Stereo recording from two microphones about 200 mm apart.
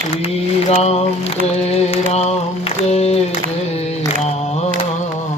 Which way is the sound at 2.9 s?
30° left (ahead or behind).